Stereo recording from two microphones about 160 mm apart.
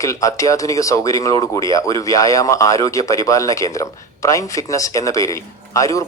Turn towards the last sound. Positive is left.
turn(degrees=20)  # may be behind; listen again after turning